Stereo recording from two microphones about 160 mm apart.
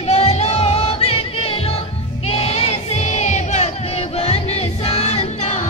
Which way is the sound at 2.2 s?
40° left (ahead or behind).